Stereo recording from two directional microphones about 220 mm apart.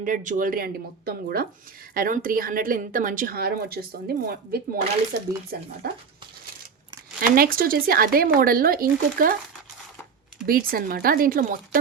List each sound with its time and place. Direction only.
0.0 s speech: 35° right (ahead or behind)
7.2 s speech: 40° right (ahead or behind)
10.4 s speech: 40° right (ahead or behind)